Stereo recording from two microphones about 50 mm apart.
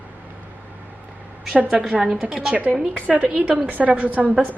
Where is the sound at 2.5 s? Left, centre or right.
Right.